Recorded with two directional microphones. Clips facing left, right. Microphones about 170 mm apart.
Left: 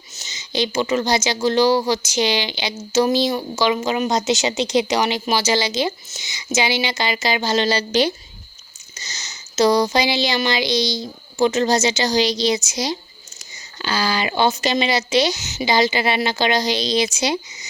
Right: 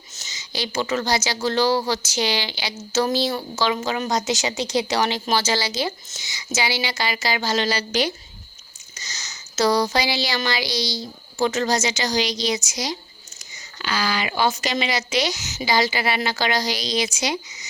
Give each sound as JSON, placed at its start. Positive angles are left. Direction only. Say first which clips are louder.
{"t": 0.2, "sound": "a woman's voice", "louder": "left 7 dB", "side_deg": 20}